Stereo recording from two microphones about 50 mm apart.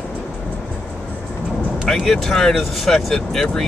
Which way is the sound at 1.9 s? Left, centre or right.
Centre.